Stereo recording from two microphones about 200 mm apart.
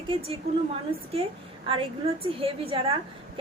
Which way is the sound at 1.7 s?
25° right (ahead or behind).